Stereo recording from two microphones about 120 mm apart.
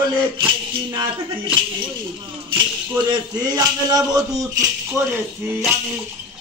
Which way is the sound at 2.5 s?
40° right (ahead or behind).